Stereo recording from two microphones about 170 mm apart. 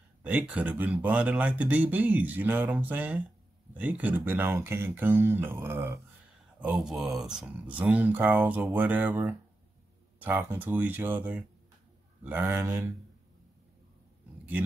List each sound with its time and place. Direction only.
0.2 s speech: 10° right (ahead or behind)